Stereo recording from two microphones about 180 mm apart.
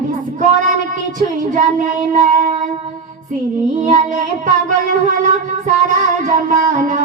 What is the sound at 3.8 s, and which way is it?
Child singing, 45° right (ahead or behind).